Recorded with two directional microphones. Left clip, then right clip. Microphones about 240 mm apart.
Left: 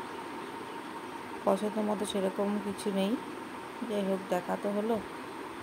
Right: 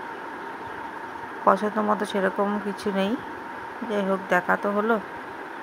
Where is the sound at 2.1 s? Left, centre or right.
Right.